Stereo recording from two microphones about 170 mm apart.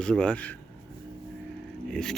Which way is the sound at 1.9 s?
5° left (ahead or behind).